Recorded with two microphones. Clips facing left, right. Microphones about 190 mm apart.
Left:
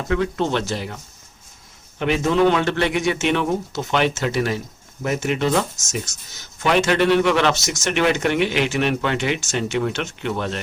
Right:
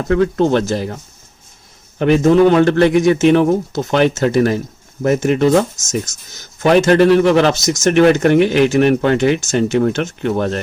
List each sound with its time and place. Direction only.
0.1 s speech: 45° right (ahead or behind)
2.0 s speech: 45° right (ahead or behind)